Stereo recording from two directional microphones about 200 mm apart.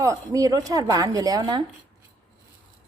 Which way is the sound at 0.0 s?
15° right (ahead or behind).